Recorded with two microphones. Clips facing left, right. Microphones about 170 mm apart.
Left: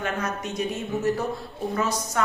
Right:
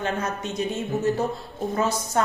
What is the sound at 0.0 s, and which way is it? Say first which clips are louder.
A woman's voice: right 1 dB; 25° right (ahead or behind).